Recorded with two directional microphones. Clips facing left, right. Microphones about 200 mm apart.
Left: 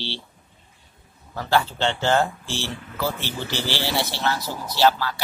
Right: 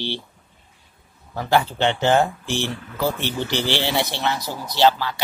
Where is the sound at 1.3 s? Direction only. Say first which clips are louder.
Right 2 dB; 15° right (ahead or behind).